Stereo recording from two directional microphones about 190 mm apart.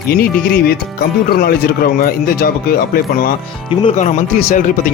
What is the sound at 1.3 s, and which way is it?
Speech, 50° left (ahead or behind).